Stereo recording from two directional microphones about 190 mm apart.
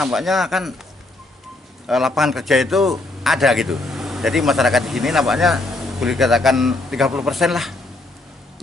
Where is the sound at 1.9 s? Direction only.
Centre (ahead or behind).